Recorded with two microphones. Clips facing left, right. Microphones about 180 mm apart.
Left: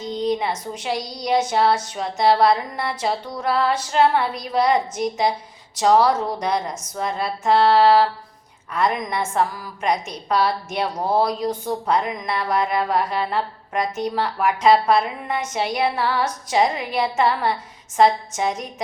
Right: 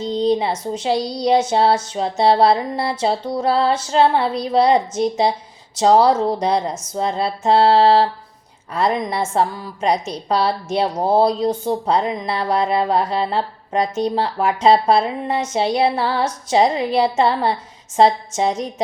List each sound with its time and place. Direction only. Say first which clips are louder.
0.0 s a woman's voice: right 5 dB; 30° right (ahead or behind)
15.5 s female singing: right 5 dB; 30° right (ahead or behind)